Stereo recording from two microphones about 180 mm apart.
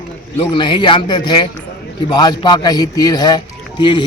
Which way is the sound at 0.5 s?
25° left (ahead or behind).